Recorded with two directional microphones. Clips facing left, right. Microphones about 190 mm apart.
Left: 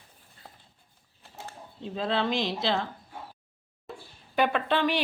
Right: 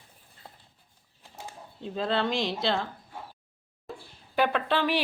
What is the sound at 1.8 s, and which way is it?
Speech, centre (ahead or behind).